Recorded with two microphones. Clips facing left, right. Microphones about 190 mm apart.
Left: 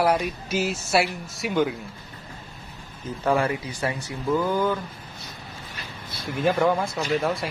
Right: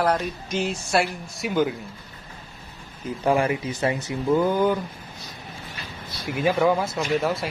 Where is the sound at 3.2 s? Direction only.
15° right (ahead or behind).